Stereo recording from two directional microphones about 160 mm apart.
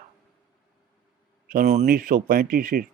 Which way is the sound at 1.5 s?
55° right (ahead or behind).